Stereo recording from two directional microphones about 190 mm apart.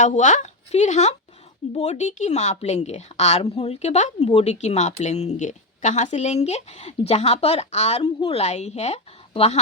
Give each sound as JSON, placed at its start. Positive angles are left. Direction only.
{"t": 0.0, "sound": "a woman's voice", "side_deg": 40}